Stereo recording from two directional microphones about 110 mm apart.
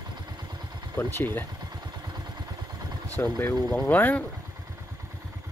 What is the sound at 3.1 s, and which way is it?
Speech, 20° left (ahead or behind).